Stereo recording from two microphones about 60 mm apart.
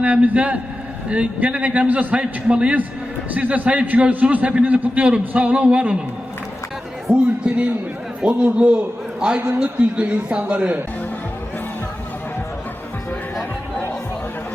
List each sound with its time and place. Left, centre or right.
0.0 s a man's voice: right
7.1 s a man's voice: centre